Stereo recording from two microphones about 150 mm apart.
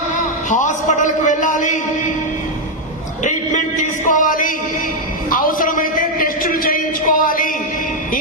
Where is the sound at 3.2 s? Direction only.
55° left (ahead or behind).